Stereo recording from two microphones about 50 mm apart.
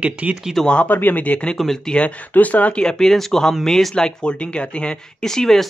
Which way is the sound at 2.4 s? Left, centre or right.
Left.